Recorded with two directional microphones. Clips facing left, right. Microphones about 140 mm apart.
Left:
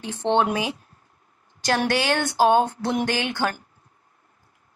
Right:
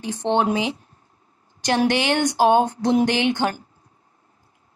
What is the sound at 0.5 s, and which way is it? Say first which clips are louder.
Mantra: right 3 dB; 20° right (ahead or behind).